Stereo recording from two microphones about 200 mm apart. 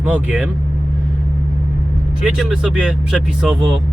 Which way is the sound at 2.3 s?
5° right (ahead or behind).